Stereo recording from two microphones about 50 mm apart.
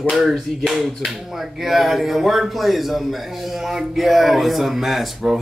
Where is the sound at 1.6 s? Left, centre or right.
Centre.